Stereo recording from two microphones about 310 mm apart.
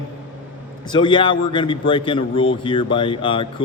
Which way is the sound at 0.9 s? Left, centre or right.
Centre.